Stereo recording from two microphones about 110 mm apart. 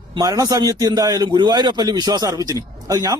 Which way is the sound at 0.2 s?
35° right (ahead or behind).